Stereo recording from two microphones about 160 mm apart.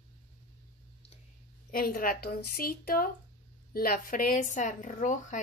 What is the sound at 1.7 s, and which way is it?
A woman's voice, 65° left (ahead or behind).